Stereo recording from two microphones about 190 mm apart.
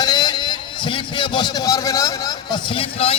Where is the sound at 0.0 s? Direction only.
20° left (ahead or behind).